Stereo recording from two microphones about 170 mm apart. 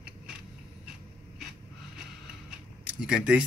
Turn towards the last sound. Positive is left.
turn(degrees=-5)  # may be behind; listen again after turning